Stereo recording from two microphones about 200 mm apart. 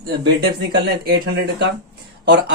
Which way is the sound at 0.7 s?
55° right (ahead or behind).